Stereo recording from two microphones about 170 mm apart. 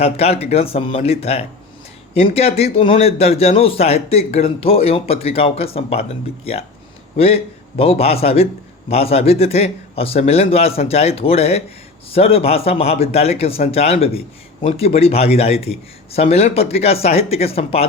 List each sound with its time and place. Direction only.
0.0 s speech: 35° left (ahead or behind)